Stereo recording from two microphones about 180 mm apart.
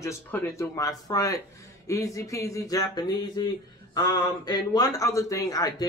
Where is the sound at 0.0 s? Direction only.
15° left (ahead or behind).